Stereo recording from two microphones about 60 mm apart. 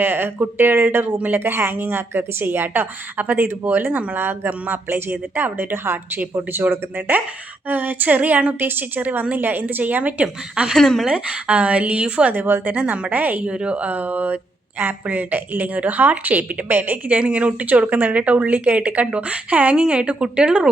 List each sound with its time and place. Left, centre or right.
0.0 s a woman's voice: right
10.8 s a woman's voice: centre
11.1 s a woman's voice: right
12.3 s speech: right
12.7 s a woman's voice: right
13.5 s a woman's voice: centre